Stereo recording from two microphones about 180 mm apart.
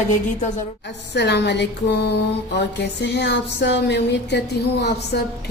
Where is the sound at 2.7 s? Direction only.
70° left (ahead or behind).